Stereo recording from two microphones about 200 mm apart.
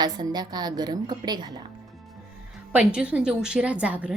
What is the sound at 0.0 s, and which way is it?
A woman's voice, 20° right (ahead or behind).